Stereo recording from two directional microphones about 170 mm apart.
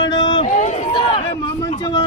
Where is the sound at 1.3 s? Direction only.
20° left (ahead or behind).